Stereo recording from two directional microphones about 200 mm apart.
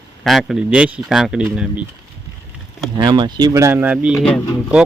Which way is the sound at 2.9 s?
20° right (ahead or behind).